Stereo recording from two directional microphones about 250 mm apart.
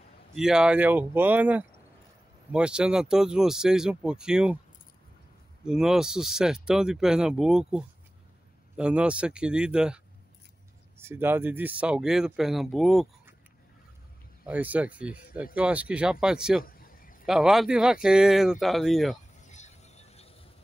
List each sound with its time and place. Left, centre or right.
0.4 s speech: centre
5.7 s speech: centre
14.4 s speech: centre
16.6 s a sound: left
17.3 s speech: centre
19.4 s a sound: left